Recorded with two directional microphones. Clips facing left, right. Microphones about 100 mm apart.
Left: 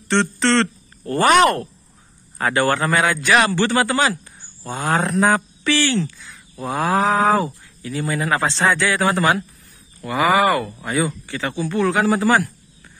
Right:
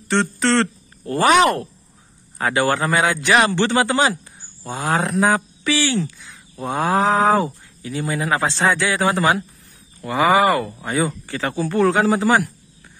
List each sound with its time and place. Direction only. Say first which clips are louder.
0.1 s a man's voice: left 1 dB; 10° right (ahead or behind)